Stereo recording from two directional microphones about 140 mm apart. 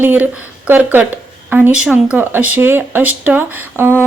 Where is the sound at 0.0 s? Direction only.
15° right (ahead or behind).